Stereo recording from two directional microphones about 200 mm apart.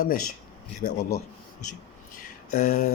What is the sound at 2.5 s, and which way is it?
Speech, 40° left (ahead or behind).